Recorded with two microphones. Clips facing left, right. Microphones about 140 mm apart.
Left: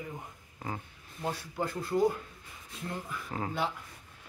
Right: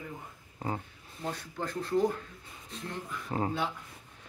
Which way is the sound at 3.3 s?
30° right (ahead or behind).